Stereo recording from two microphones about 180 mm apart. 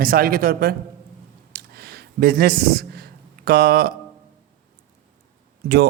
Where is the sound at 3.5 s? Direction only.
60° right (ahead or behind).